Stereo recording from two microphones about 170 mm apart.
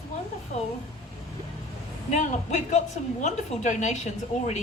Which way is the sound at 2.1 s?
45° left (ahead or behind).